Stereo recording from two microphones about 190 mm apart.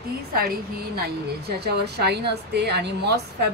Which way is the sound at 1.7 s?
60° right (ahead or behind).